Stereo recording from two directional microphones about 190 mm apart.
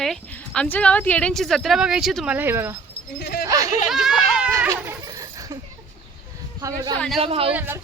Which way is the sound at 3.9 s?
Centre (ahead or behind).